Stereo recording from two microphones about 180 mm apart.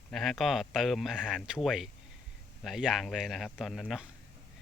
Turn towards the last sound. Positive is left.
turn(degrees=0)  # may be behind; listen again after turning